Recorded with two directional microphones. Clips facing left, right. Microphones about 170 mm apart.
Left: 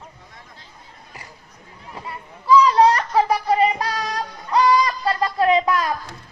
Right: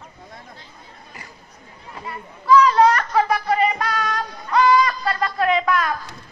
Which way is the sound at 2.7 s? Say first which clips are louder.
Even; 30° left (ahead or behind).